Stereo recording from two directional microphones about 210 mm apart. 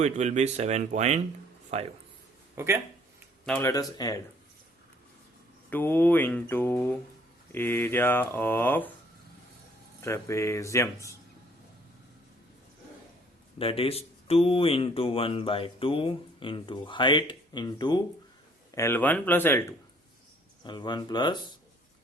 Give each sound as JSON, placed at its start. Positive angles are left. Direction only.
{"t": 0.0, "sound": "speech", "side_deg": -35}
{"t": 2.6, "sound": "speech", "side_deg": -10}
{"t": 3.4, "sound": "speech", "side_deg": 5}
{"t": 3.7, "sound": "speech", "side_deg": 15}
{"t": 5.7, "sound": "speech", "side_deg": 10}
{"t": 10.0, "sound": "speech", "side_deg": 15}
{"t": 13.6, "sound": "speech", "side_deg": 25}